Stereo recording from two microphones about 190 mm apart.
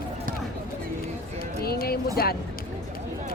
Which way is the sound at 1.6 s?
55° left (ahead or behind).